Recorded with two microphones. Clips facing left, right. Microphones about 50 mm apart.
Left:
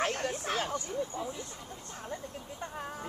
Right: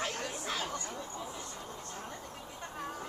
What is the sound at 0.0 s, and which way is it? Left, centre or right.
Chatter, left.